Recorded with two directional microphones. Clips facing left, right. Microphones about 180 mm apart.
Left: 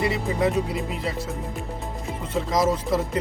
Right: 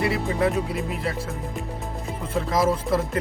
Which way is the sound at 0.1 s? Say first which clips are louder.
Even; centre (ahead or behind).